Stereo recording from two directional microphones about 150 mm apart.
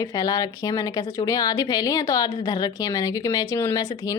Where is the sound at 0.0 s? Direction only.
25° left (ahead or behind).